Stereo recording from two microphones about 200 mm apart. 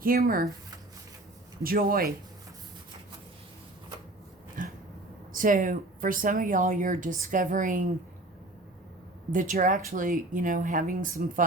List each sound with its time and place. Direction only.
0.0 s speech: 45° right (ahead or behind)
1.6 s speech: 45° right (ahead or behind)
4.6 s a sound: 40° right (ahead or behind)
5.4 s speech: 40° right (ahead or behind)
9.3 s speech: 40° right (ahead or behind)